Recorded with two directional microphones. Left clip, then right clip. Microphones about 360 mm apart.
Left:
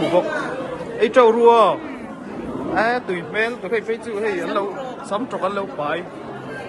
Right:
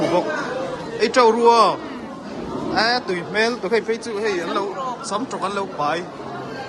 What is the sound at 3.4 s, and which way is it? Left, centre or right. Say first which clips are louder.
Speech: right 3 dB; centre.